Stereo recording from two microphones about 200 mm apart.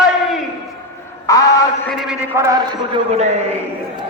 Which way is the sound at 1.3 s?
15° left (ahead or behind).